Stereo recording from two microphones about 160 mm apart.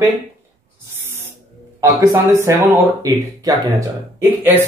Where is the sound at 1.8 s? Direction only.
20° right (ahead or behind).